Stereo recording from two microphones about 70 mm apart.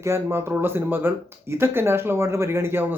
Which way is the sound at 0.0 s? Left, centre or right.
Right.